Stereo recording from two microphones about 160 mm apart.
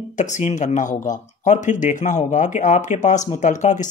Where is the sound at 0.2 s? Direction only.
50° left (ahead or behind).